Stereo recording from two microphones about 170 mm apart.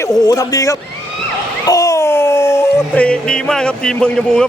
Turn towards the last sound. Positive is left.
turn(degrees=5)  # may be behind; listen again after turning